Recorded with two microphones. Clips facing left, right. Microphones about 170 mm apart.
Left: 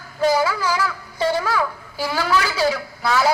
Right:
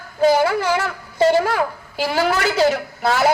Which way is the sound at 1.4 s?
60° right (ahead or behind).